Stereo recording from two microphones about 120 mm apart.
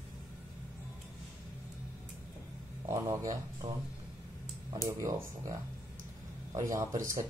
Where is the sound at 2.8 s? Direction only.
25° right (ahead or behind).